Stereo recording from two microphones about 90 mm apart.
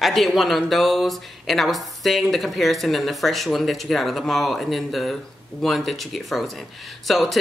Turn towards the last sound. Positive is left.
turn(degrees=0)  # may be behind; listen again after turning